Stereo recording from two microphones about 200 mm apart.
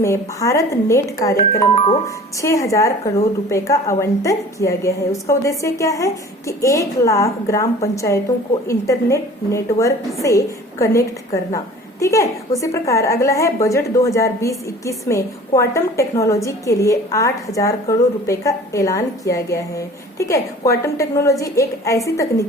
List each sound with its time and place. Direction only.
0.0 s a woman's voice: 15° left (ahead or behind)
1.7 s speech: 30° left (ahead or behind)
2.4 s a woman's voice: 15° left (ahead or behind)